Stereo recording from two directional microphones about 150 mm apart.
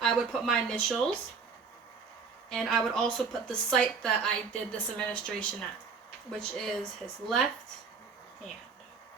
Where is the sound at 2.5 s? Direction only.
Centre (ahead or behind).